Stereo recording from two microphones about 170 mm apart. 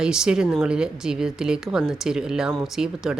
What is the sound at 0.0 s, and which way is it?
Speech, 5° right (ahead or behind).